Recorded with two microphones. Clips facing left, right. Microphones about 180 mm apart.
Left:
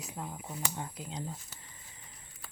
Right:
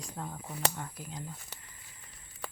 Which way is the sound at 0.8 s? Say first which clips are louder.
Left 2 dB; 20° left (ahead or behind).